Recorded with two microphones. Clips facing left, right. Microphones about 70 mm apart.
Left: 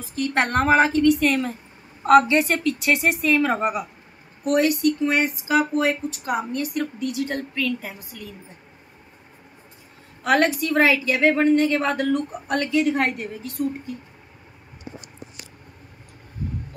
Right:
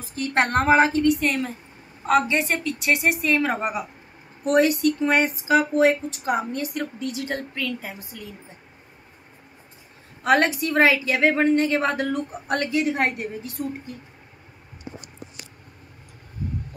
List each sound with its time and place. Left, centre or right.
0.1 s a woman's voice: right
0.7 s a woman's voice: centre
4.5 s a woman's voice: right
10.2 s a woman's voice: right